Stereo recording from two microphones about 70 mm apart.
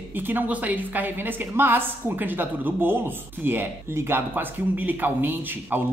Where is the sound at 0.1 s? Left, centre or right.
Right.